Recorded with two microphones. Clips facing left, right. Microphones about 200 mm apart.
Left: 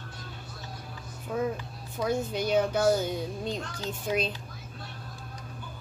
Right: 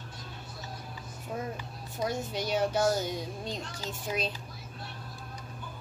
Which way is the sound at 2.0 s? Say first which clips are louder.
Left 4 dB; 55° left (ahead or behind).